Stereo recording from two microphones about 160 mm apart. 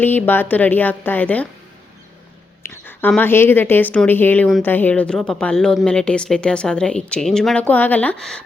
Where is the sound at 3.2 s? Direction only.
15° left (ahead or behind).